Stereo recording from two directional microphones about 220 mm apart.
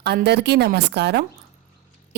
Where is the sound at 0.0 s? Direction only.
50° right (ahead or behind).